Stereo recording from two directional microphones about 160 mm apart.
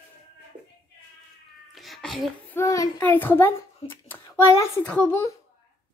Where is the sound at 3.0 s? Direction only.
10° left (ahead or behind).